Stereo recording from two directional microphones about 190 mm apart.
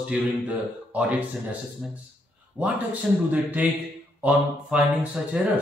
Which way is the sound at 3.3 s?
10° right (ahead or behind).